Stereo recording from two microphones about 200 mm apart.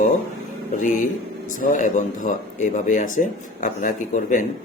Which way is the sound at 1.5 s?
40° left (ahead or behind).